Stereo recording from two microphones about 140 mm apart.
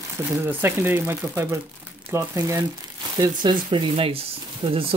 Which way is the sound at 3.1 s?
30° right (ahead or behind).